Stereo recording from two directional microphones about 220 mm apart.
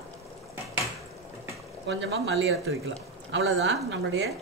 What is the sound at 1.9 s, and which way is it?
Speech, 50° right (ahead or behind).